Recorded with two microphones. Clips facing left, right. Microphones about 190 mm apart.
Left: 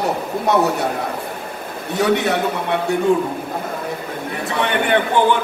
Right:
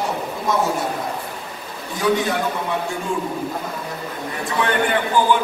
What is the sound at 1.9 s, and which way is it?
Speech, 65° left (ahead or behind).